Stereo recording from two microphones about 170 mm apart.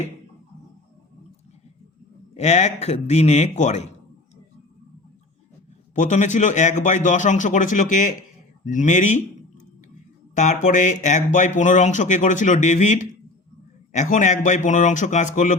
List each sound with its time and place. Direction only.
2.3 s a man's voice: 40° left (ahead or behind)
5.9 s speech: 45° left (ahead or behind)
10.3 s speech: 50° left (ahead or behind)